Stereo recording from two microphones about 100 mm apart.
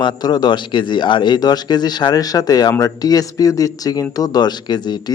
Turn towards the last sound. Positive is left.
turn(degrees=45)  # may be behind; listen again after turning